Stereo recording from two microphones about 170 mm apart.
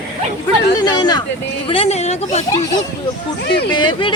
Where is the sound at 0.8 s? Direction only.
25° left (ahead or behind).